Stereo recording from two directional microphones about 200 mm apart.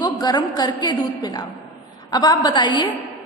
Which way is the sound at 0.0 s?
20° left (ahead or behind).